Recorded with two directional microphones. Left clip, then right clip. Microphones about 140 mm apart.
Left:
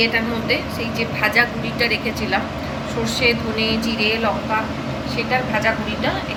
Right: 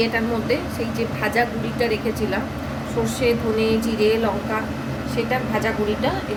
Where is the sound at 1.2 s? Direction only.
85° right.